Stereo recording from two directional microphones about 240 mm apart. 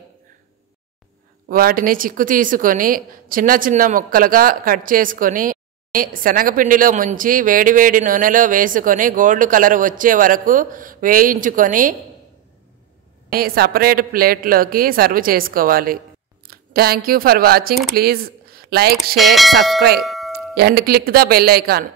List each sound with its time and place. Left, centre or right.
1.5 s a woman's voice: right
13.3 s a woman's voice: right
19.1 s speech: centre
20.0 s music: centre
20.5 s a woman's voice: right